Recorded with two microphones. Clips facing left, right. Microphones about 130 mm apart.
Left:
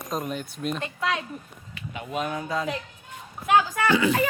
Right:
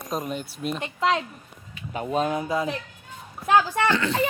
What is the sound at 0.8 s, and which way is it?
Speech, 25° right (ahead or behind).